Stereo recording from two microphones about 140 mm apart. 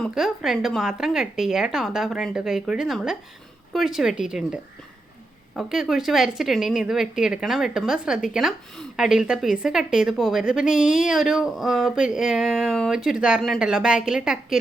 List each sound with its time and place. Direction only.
0.1 s speech: centre (ahead or behind)